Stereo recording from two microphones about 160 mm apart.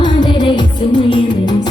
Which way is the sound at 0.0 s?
30° left (ahead or behind).